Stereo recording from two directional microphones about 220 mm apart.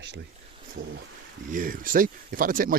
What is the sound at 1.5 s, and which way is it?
Speech, 40° right (ahead or behind).